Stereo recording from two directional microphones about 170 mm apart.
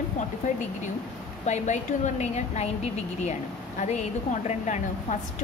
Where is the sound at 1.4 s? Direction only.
45° left (ahead or behind).